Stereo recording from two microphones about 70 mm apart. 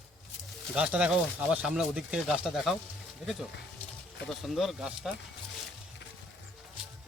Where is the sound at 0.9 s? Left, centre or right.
Centre.